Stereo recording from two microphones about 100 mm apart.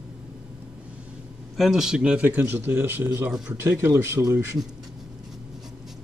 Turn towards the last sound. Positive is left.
turn(degrees=-10)  # may be behind; listen again after turning